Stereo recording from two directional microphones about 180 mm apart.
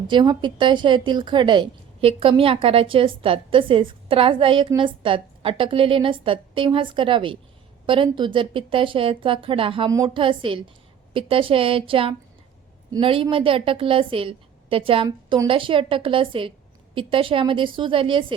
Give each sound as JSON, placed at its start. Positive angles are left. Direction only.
{"t": 0.1, "sound": "a woman's voice", "side_deg": -25}